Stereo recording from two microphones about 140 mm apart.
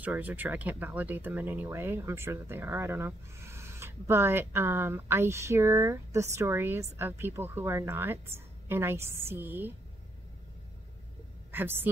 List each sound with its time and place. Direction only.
0.0 s speech: 10° right (ahead or behind)
11.5 s speech: 15° right (ahead or behind)